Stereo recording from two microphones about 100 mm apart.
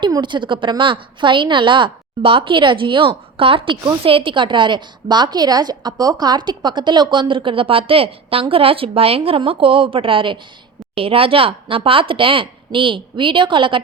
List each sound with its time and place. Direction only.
0.0 s a woman's voice: 50° right (ahead or behind)